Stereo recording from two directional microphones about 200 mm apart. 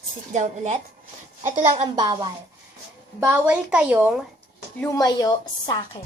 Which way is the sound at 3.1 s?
10° right (ahead or behind).